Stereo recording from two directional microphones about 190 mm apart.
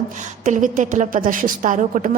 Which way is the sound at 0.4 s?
40° right (ahead or behind).